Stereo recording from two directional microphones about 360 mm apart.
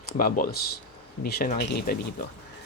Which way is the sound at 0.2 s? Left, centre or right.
Left.